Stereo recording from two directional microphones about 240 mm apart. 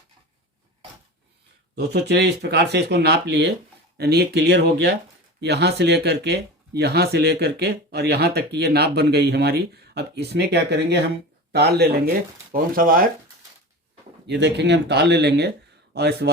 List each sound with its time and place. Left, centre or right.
1.7 s speech: right
14.3 s speech: right